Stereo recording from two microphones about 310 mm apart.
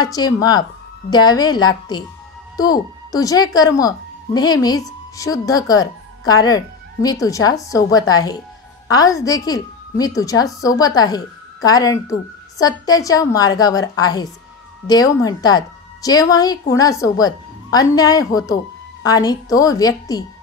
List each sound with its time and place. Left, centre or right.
0.0 s a woman's voice: centre